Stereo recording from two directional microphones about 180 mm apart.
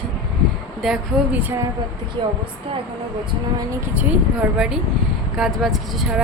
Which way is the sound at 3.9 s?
10° right (ahead or behind).